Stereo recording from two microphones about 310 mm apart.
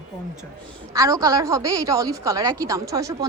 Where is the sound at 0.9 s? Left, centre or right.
Centre.